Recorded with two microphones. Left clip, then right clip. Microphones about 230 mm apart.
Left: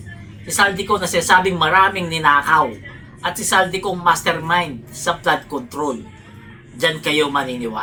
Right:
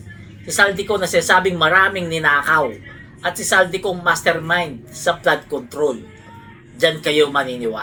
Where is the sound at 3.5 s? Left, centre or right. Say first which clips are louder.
Right 1 dB; centre.